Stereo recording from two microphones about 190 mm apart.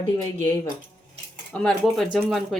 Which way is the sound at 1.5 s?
Centre (ahead or behind).